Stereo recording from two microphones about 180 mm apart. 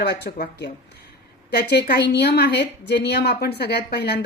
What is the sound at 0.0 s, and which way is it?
A woman's voice, 65° left (ahead or behind).